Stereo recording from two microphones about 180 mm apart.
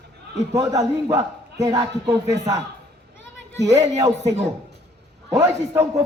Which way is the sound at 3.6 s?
20° right (ahead or behind).